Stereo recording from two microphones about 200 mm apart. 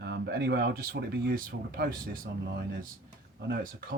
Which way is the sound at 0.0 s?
55° right (ahead or behind).